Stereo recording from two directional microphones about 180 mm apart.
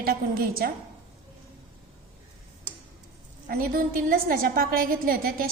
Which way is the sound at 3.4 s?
55° right (ahead or behind).